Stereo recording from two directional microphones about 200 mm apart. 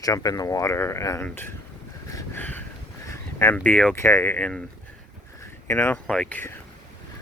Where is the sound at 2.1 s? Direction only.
15° left (ahead or behind).